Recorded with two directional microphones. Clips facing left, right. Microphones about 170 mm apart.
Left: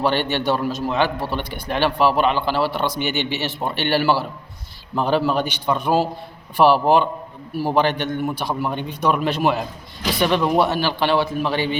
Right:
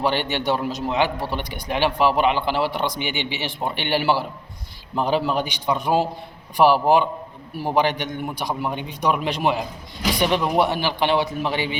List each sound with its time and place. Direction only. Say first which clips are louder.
0.0 s a man's voice: left 2 dB; 15° right (ahead or behind)